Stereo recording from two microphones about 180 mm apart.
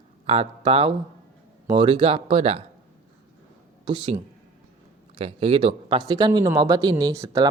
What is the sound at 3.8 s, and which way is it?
Speech, 25° right (ahead or behind).